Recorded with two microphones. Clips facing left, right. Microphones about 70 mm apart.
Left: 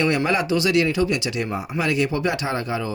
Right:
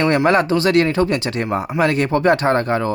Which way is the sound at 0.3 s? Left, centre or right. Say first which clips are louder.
Right 6 dB; right.